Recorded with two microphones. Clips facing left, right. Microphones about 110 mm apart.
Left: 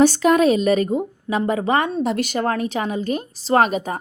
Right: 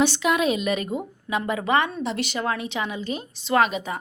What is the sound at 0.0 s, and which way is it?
A woman's voice, 40° left (ahead or behind).